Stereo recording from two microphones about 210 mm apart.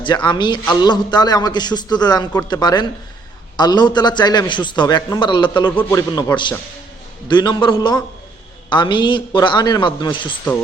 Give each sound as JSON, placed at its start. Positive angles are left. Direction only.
{"t": 0.0, "sound": "a man's voice", "side_deg": 20}